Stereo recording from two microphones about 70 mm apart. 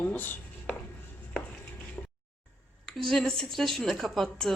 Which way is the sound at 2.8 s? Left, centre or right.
Centre.